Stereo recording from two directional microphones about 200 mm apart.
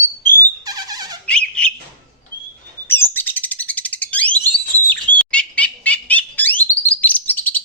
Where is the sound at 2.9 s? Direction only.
10° left (ahead or behind).